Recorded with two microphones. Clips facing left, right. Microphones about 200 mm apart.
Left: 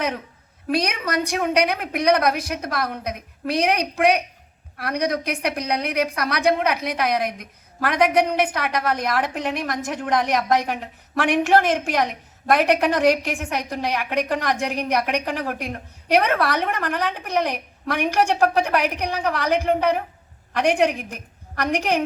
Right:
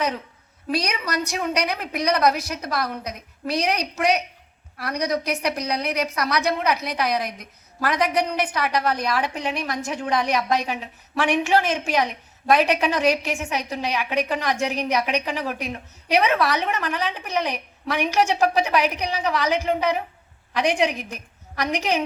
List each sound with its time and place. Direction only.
0.7 s a woman's voice: 55° left (ahead or behind)